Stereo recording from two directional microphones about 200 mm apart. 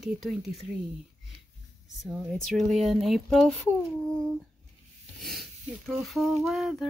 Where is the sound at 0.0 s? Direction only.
Centre (ahead or behind).